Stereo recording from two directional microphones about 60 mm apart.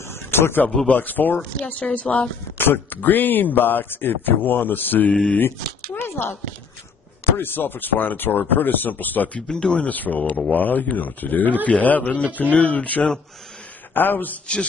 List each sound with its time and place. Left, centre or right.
0.1 s a sound: left
0.8 s speech: left
2.6 s speech: left
5.1 s speech: centre
5.4 s speech: left
7.3 s speech: left
9.5 s speech: centre; by 14.3 s left